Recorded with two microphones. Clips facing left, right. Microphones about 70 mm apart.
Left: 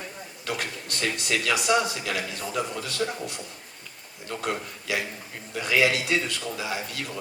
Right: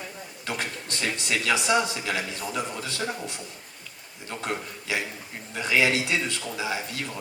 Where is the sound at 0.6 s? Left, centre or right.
Right.